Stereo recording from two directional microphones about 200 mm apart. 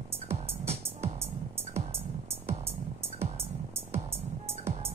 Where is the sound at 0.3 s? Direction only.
30° right (ahead or behind).